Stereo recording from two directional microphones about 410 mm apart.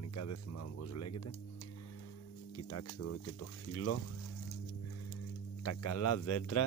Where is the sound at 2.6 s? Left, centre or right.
Left.